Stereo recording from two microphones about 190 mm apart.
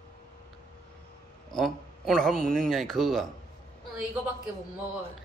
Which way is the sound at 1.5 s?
Centre (ahead or behind).